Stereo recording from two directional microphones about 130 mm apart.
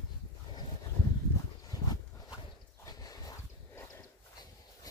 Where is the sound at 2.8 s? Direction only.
30° left (ahead or behind).